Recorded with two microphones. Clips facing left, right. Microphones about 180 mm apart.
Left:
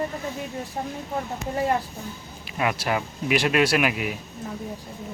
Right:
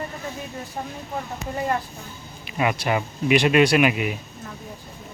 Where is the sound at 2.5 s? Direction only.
Centre (ahead or behind).